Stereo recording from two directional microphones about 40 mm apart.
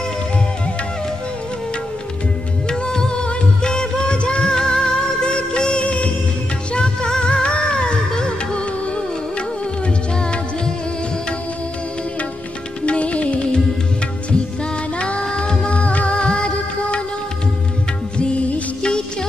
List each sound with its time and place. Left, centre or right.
2.7 s music: centre
12.8 s music: left
15.0 s music: left
15.8 s music: left
16.3 s music of bollywood: left
18.1 s music: left
18.8 s music: left